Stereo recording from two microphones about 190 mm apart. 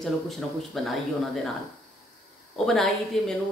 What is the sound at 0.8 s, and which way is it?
Speech, centre (ahead or behind).